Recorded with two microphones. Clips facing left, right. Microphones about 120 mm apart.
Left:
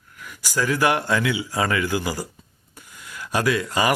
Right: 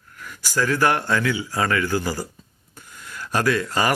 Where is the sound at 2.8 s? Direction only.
10° left (ahead or behind).